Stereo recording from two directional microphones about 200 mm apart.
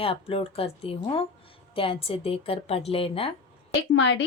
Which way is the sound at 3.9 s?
65° left (ahead or behind).